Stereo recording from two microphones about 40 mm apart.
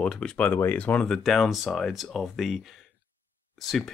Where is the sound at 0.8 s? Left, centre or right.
Left.